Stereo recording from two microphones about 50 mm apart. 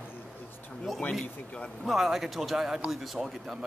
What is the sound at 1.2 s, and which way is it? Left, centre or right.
Speech, left.